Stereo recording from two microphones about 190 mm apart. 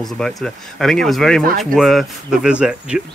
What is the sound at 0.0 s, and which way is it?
Speech, centre (ahead or behind).